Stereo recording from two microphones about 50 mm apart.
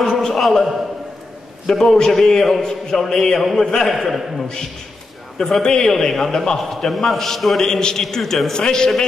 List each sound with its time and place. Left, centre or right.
0.0 s a sound: centre
0.4 s a man's voice: centre
1.7 s a man's voice: centre